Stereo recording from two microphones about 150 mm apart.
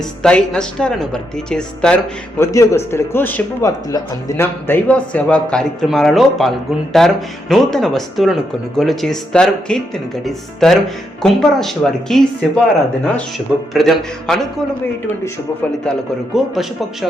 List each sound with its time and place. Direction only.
0.2 s speech: 5° left (ahead or behind)
2.4 s speech: 20° left (ahead or behind); by 12.5 s centre (ahead or behind)
13.7 s speech: centre (ahead or behind)
15.0 s speech: 15° left (ahead or behind)